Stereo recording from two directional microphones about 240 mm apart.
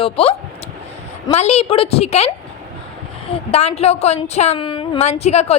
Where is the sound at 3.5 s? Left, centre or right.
Left.